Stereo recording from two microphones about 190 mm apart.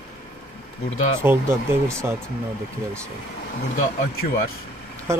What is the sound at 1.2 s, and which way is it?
Speech, 10° right (ahead or behind).